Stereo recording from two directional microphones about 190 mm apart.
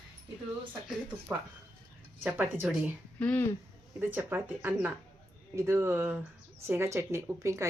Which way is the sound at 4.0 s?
10° right (ahead or behind).